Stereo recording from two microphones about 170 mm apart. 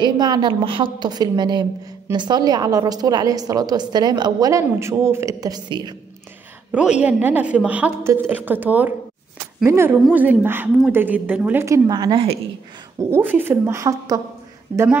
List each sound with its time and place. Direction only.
0.0 s a woman's voice: 25° right (ahead or behind)
6.7 s a woman's voice: 5° right (ahead or behind); by 12.4 s 30° right (ahead or behind)
13.1 s a woman's voice: 10° right (ahead or behind)